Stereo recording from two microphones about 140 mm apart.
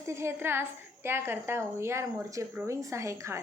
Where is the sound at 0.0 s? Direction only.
20° right (ahead or behind).